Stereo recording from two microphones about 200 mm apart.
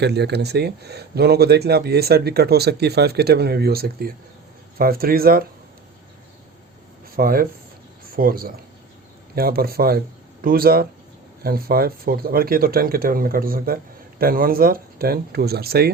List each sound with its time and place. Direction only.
0.0 s speech: 55° right (ahead or behind)
7.2 s speech: 45° right (ahead or behind)